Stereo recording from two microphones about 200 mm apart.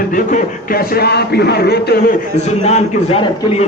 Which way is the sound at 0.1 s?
45° left (ahead or behind).